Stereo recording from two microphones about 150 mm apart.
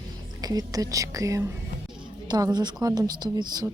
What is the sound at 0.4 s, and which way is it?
Speech, 25° right (ahead or behind).